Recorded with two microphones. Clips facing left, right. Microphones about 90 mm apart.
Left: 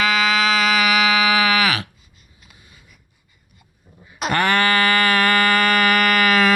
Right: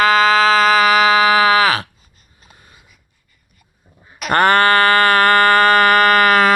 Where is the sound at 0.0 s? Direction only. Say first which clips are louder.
Right 6 dB; 40° right (ahead or behind).